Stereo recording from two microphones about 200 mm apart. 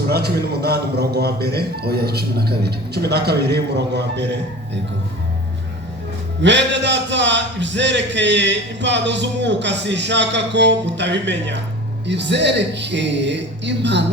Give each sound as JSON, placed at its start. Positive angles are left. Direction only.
{"t": 0.1, "sound": "a man's voice", "side_deg": -55}
{"t": 6.4, "sound": "a man's voice", "side_deg": -65}